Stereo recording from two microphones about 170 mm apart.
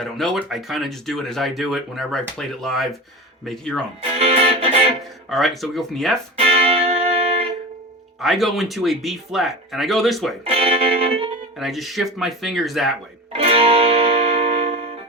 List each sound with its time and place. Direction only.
0.0 s speech: centre (ahead or behind)
4.2 s music: 35° right (ahead or behind)
5.3 s speech: centre (ahead or behind)
6.4 s music: 35° right (ahead or behind)
8.2 s speech: centre (ahead or behind)
10.4 s music: 35° right (ahead or behind)
11.5 s speech: centre (ahead or behind)
13.3 s music: 35° right (ahead or behind)